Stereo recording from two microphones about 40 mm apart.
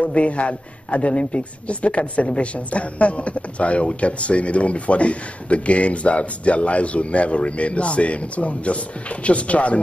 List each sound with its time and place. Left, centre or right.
0.0 s a man's voice: left